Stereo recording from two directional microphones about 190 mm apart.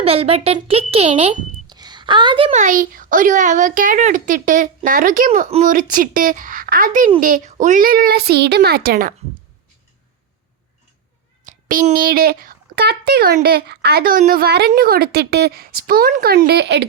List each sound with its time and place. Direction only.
0.0 s a child's voice: 30° right (ahead or behind)
2.6 s a woman's voice: 45° right (ahead or behind)
11.4 s a woman's voice: 45° right (ahead or behind); by 16.8 s 60° right (ahead or behind)